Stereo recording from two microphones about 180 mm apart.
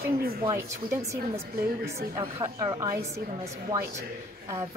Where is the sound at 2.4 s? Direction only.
20° right (ahead or behind).